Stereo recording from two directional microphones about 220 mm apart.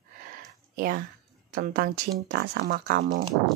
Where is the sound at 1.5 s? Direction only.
40° right (ahead or behind).